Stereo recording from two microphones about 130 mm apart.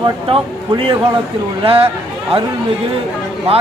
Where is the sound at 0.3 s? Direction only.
45° right (ahead or behind).